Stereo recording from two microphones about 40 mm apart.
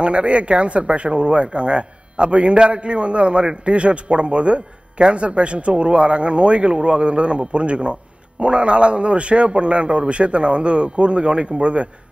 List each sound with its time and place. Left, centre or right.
0.0 s a man's voice: right